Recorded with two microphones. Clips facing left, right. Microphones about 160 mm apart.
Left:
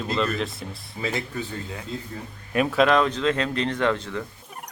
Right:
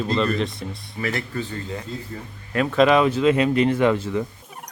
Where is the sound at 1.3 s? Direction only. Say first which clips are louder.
Right 3 dB; 5° left (ahead or behind).